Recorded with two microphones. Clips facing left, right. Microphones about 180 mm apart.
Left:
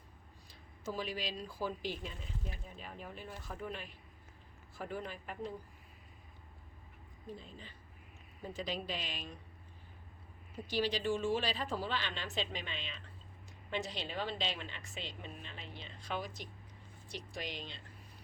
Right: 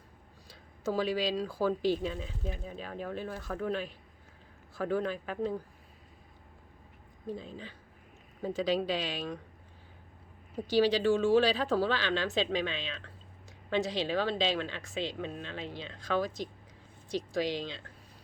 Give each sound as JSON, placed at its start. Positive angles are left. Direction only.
{"t": 0.9, "sound": "a woman's voice", "side_deg": -90}
{"t": 7.3, "sound": "a woman's voice", "side_deg": -90}
{"t": 10.7, "sound": "a woman's voice", "side_deg": -90}